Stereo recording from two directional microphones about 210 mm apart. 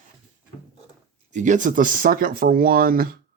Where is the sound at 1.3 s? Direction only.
35° right (ahead or behind).